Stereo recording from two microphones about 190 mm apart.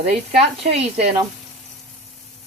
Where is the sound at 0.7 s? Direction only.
35° right (ahead or behind).